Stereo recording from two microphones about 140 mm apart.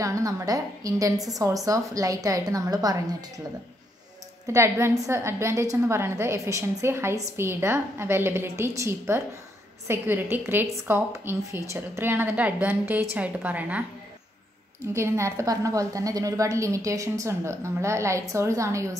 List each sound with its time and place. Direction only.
0.0 s a woman's voice: 25° right (ahead or behind)
4.5 s a woman's voice: 20° right (ahead or behind)
15.0 s a woman's voice: 20° right (ahead or behind)